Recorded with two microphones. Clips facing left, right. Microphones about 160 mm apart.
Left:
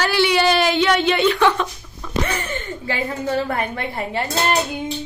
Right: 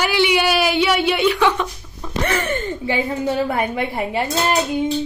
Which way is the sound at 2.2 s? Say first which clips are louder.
Right 5 dB; 90° right.